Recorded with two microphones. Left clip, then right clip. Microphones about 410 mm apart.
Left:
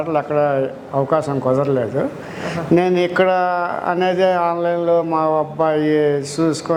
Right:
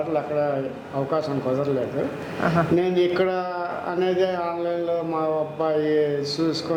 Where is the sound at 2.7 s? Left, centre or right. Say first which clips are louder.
Left 11 dB; left.